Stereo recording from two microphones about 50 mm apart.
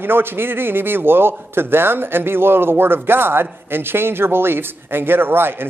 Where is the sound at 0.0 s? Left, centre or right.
Right.